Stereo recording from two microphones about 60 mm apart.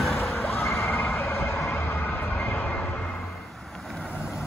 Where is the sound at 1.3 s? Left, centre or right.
Left.